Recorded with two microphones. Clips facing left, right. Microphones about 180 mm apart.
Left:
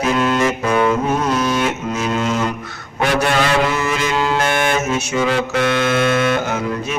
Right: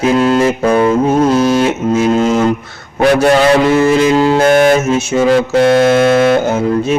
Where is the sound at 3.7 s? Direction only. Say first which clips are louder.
Right 10 dB; 35° right (ahead or behind).